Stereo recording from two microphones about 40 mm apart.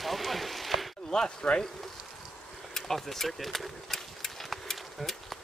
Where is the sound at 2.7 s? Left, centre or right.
Centre.